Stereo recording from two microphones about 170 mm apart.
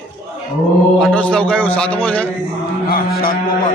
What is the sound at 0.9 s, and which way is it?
A man's voice, 5° left (ahead or behind).